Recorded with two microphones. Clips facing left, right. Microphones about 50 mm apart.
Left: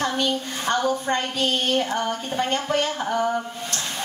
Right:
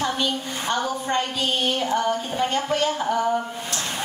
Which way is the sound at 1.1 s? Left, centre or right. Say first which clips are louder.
Left 1 dB; left.